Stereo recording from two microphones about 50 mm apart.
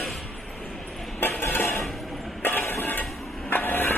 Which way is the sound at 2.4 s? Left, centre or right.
Left.